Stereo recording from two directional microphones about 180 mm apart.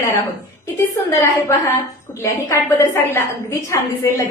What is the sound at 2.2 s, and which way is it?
A woman's voice, 15° left (ahead or behind).